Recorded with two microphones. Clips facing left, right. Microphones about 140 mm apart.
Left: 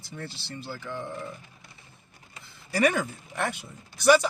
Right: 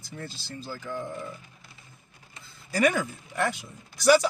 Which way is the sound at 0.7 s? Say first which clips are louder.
Right 1 dB; 45° right (ahead or behind).